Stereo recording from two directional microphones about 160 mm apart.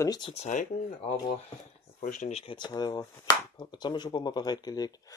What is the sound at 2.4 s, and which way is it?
Speech, 30° left (ahead or behind).